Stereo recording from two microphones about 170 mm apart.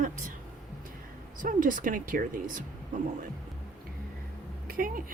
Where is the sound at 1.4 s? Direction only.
50° right (ahead or behind).